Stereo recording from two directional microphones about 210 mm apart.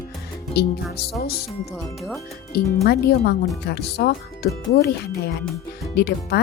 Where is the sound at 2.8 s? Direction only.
50° left (ahead or behind).